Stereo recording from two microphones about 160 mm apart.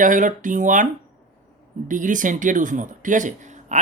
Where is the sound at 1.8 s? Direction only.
55° right (ahead or behind).